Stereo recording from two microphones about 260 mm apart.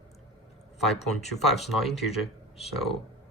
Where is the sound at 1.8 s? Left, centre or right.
Centre.